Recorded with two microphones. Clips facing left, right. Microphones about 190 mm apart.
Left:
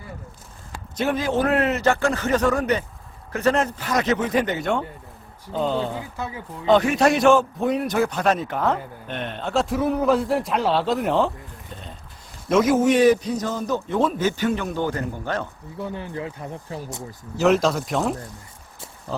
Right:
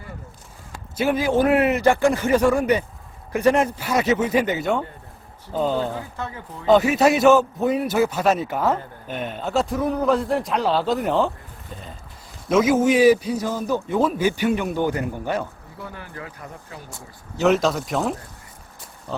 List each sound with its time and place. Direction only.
0.9 s a man's voice: 10° right (ahead or behind)
5.9 s speech: 10° left (ahead or behind)
6.7 s a man's voice: 5° right (ahead or behind)
11.7 s a sound: 5° right (ahead or behind)
12.5 s a man's voice: centre (ahead or behind)
15.8 s speech: 25° left (ahead or behind)
17.3 s a man's voice: centre (ahead or behind)